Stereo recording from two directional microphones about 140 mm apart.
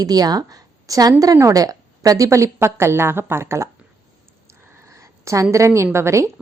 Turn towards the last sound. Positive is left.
turn(degrees=-20)  # may be behind; listen again after turning